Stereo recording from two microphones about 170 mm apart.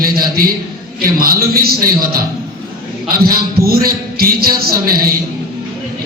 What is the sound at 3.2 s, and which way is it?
A man's voice, 65° right (ahead or behind).